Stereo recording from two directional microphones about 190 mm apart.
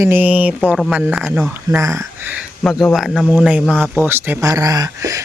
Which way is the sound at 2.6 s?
Centre (ahead or behind).